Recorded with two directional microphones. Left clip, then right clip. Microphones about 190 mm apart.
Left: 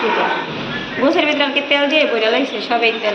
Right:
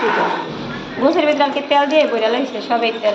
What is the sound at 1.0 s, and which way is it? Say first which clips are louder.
A woman's voice: right 1 dB; 20° right (ahead or behind).